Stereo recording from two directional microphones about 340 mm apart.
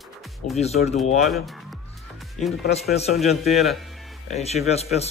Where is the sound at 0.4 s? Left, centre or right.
Left.